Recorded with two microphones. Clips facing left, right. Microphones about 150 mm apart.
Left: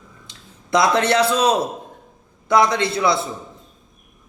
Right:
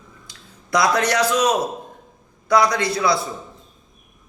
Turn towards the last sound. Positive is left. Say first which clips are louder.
# left 1 dB
turn(degrees=25)  # may be behind; listen again after turning